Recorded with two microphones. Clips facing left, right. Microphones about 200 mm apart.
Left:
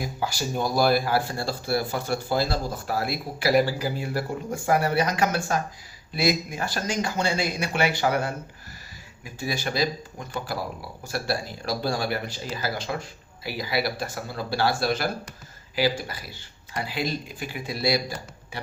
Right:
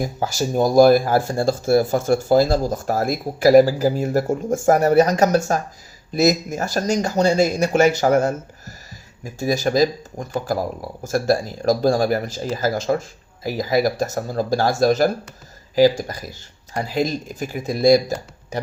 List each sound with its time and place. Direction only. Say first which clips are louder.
0.0 s speech: right 6 dB; 45° right (ahead or behind)